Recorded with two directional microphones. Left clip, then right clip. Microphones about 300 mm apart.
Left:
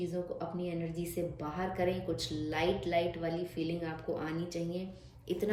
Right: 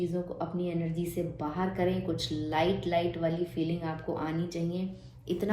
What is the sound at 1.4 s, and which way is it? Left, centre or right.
Speech, centre.